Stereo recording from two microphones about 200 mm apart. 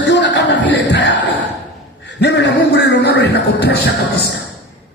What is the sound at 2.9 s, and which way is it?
Speech, 55° left (ahead or behind).